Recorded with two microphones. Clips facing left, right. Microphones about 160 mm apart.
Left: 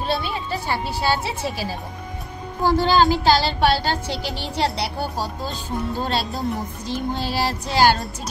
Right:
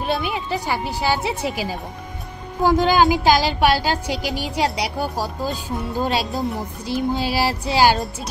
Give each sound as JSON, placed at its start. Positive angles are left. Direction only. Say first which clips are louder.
{"t": 0.0, "sound": "a woman's voice", "louder": "right 2 dB", "side_deg": -15}